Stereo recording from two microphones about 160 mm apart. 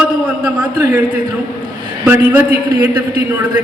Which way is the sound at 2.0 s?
10° right (ahead or behind).